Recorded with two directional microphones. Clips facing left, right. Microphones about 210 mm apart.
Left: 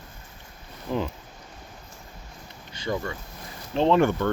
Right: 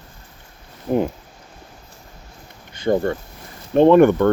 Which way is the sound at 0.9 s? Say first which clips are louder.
Right 8 dB; 40° right (ahead or behind).